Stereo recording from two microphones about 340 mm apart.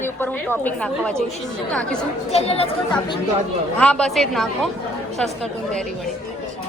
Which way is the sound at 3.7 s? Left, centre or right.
Centre.